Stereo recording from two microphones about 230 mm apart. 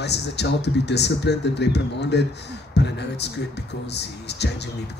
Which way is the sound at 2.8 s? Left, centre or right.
Left.